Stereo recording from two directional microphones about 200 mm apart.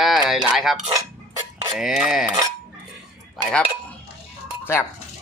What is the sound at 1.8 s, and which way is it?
Speech, centre (ahead or behind).